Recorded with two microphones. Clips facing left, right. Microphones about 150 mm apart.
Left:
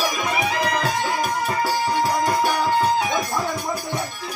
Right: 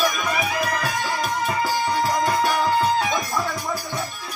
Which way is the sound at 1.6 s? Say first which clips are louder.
Left 2 dB; 15° left (ahead or behind).